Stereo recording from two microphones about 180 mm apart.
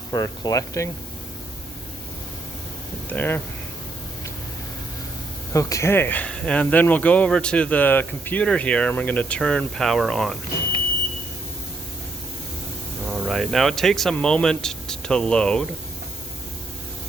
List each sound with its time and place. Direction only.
0.1 s speech: 20° left (ahead or behind)
3.1 s speech: 10° left (ahead or behind)
5.5 s speech: 20° left (ahead or behind); by 10.3 s centre (ahead or behind)
13.1 s speech: centre (ahead or behind)